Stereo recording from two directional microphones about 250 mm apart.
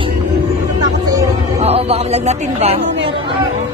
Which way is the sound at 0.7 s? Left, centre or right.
Centre.